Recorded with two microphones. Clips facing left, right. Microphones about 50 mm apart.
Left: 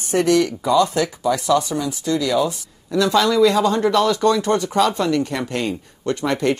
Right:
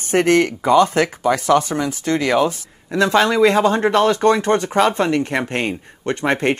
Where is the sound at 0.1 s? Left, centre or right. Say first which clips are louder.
Right 2 dB; right.